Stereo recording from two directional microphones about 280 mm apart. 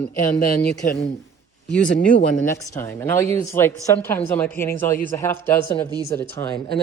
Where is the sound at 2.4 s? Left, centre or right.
Centre.